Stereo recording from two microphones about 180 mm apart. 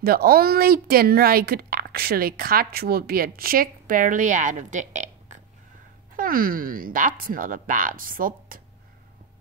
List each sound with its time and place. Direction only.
0.0 s a woman's voice: 55° right (ahead or behind); by 5.4 s 40° right (ahead or behind)
6.1 s speech: 50° right (ahead or behind)